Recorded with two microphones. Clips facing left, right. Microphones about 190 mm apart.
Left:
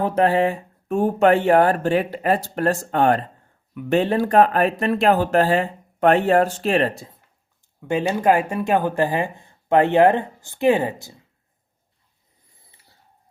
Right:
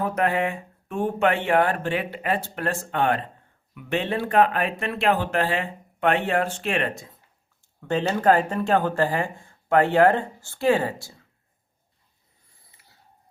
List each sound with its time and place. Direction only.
0.0 s speech: 30° left (ahead or behind)
7.8 s speech: 10° left (ahead or behind)